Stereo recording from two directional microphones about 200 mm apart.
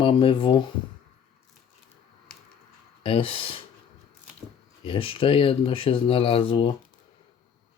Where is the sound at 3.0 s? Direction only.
25° left (ahead or behind).